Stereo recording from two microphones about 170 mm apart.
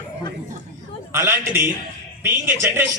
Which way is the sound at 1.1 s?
15° right (ahead or behind).